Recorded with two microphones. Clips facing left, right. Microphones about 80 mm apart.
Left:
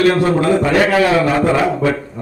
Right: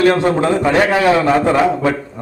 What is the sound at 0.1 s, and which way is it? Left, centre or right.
A man's voice, right.